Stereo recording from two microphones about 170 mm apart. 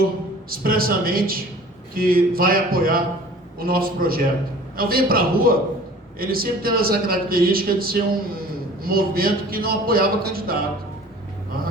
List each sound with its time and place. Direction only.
0.5 s speech: 60° right (ahead or behind)